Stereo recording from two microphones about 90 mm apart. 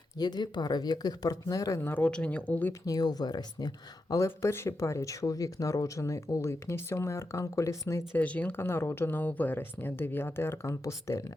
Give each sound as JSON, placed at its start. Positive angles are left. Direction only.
{"t": 0.2, "sound": "speech", "side_deg": 50}
{"t": 1.8, "sound": "speech", "side_deg": 20}
{"t": 2.8, "sound": "speech", "side_deg": 45}
{"t": 4.4, "sound": "speech", "side_deg": 30}
{"t": 8.1, "sound": "speech", "side_deg": 15}